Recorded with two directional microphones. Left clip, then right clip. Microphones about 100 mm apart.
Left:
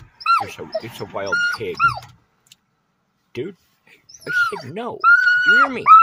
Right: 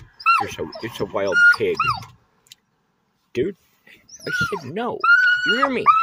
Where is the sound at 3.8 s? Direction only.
5° right (ahead or behind).